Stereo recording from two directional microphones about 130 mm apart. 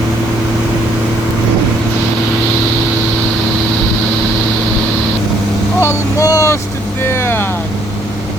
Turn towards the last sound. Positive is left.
turn(degrees=20)  # may be behind; listen again after turning